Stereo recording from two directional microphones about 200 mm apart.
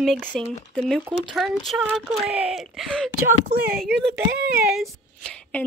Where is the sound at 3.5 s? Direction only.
50° right (ahead or behind).